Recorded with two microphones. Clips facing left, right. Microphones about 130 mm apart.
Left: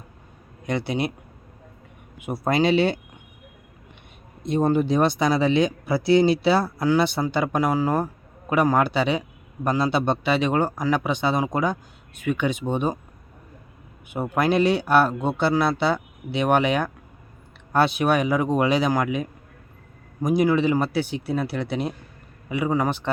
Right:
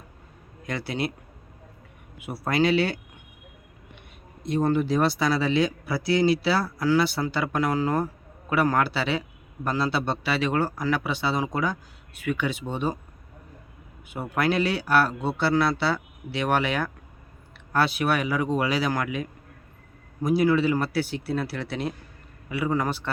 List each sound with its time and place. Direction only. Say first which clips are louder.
0.7 s speech: left 4 dB; 20° left (ahead or behind)
2.1 s speech: left 3 dB; 20° left (ahead or behind)
4.4 s speech: left 3 dB; 20° left (ahead or behind)
14.1 s speech: left 3 dB; 20° left (ahead or behind)